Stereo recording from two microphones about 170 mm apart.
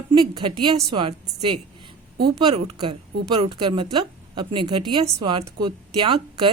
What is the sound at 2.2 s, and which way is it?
A woman's voice, 35° right (ahead or behind).